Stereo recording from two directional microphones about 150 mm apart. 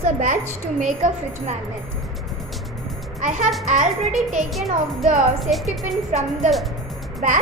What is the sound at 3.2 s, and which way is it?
Speech, 55° right (ahead or behind).